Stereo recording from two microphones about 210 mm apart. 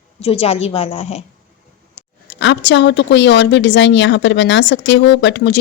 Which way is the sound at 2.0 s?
30° left (ahead or behind).